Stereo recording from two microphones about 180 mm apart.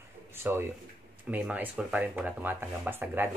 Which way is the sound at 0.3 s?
10° right (ahead or behind).